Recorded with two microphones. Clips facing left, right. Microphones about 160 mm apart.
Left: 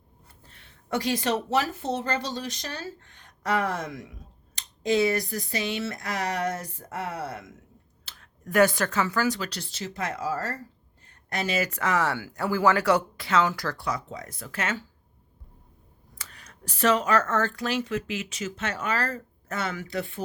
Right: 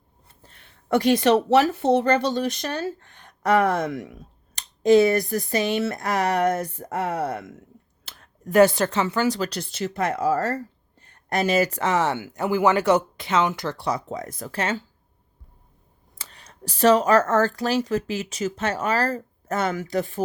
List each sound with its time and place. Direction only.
0.9 s speech: 65° right (ahead or behind)
8.0 s a sound: 40° right (ahead or behind)
8.4 s speech: 30° right (ahead or behind)
9.4 s speech: 50° right (ahead or behind)
11.3 s speech: 45° right (ahead or behind)
11.8 s speech: 25° right (ahead or behind)
13.9 s speech: 45° right (ahead or behind)
16.1 s speech: 30° right (ahead or behind)